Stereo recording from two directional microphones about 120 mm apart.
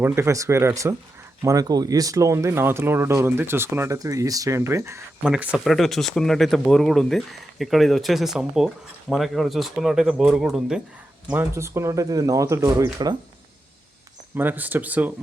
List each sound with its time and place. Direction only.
0.0 s speech: 25° right (ahead or behind)
5.2 s speech: 10° right (ahead or behind)
5.6 s speech: centre (ahead or behind)
11.3 s speech: 20° right (ahead or behind)
14.3 s speech: 15° right (ahead or behind)